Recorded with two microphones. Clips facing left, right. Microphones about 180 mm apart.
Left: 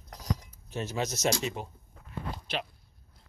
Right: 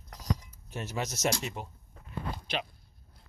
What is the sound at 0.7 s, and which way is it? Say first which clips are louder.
Speech: left 3 dB; 20° left (ahead or behind).